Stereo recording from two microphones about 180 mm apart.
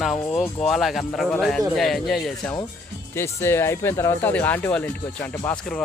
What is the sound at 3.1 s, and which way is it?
Speech, 15° left (ahead or behind).